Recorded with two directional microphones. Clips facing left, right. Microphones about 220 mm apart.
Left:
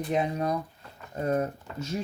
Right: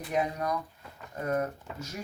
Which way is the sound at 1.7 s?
5° right (ahead or behind).